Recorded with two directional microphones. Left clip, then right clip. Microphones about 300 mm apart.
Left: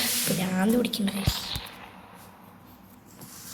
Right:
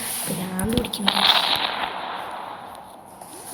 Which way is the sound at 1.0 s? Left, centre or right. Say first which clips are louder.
Right 14 dB; right.